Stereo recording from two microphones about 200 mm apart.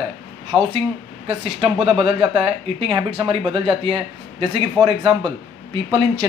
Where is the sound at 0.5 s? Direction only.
5° right (ahead or behind).